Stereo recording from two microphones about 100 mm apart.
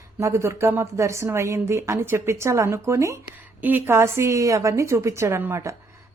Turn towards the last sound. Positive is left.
turn(degrees=-25)  # may be behind; listen again after turning